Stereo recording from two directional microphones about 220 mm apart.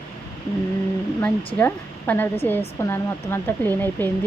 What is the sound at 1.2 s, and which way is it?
Speech, 5° left (ahead or behind).